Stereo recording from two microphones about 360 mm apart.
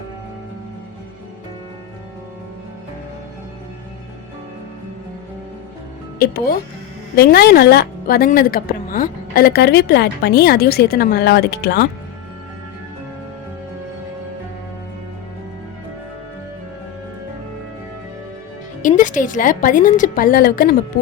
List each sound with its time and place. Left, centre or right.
6.1 s a woman's voice: left
18.8 s a woman's voice: left